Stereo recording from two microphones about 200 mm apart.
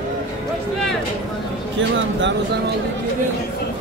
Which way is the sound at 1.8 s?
65° right (ahead or behind).